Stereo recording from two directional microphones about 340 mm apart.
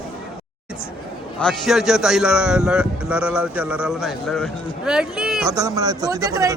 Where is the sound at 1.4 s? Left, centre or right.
Centre.